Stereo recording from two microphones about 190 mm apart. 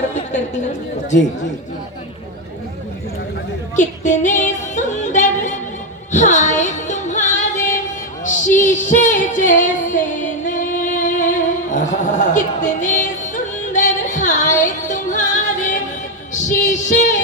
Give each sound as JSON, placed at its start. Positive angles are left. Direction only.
{"t": 0.1, "sound": "a woman's voice", "side_deg": 40}
{"t": 3.8, "sound": "music", "side_deg": 40}
{"t": 8.2, "sound": "singing", "side_deg": 40}
{"t": 13.3, "sound": "music", "side_deg": 40}